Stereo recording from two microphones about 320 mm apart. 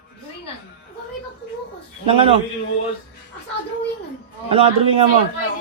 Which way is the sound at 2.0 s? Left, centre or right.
Centre.